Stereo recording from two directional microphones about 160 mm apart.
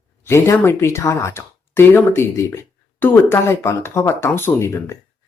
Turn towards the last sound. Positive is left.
turn(degrees=15)  # may be behind; listen again after turning